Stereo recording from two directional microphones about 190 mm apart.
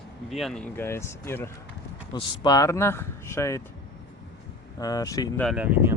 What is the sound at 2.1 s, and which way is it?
Speech, 25° left (ahead or behind).